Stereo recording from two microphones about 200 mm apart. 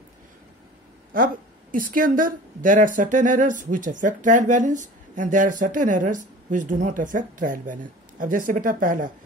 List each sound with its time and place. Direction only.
1.1 s a woman's voice: 45° right (ahead or behind)